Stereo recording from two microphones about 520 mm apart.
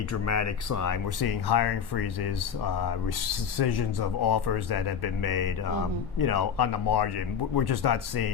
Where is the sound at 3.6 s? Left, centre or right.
Left.